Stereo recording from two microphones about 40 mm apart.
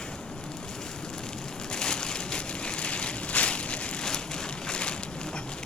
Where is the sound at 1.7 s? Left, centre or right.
Centre.